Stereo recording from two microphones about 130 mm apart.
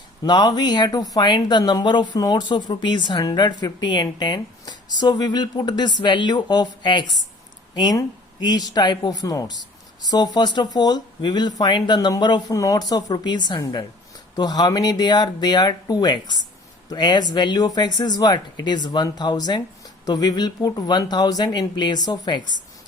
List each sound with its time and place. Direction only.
0.2 s speech: 35° left (ahead or behind)